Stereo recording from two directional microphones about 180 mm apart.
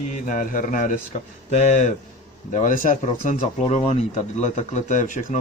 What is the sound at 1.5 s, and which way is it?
A man's voice, 40° left (ahead or behind).